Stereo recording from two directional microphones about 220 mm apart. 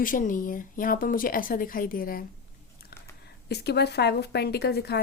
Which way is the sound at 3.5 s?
50° left (ahead or behind).